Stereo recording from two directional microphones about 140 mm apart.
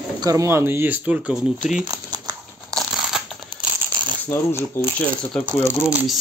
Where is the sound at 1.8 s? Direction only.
25° right (ahead or behind).